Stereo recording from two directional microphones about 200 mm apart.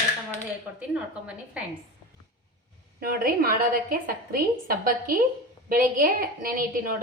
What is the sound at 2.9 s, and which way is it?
A woman's voice, 50° right (ahead or behind).